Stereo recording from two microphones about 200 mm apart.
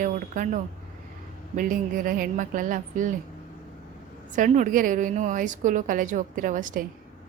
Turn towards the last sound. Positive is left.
turn(degrees=-40)  # may be behind; listen again after turning